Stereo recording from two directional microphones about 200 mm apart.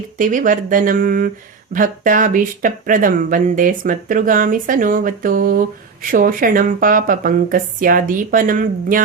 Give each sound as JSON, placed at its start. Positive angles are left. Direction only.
{"t": 0.2, "sound": "speech", "side_deg": -40}